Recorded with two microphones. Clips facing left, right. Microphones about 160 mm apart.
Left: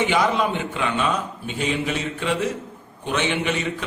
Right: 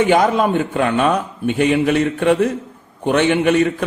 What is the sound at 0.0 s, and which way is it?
A man's voice, 50° right (ahead or behind).